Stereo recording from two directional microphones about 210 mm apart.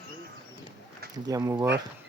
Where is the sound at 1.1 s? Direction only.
15° right (ahead or behind).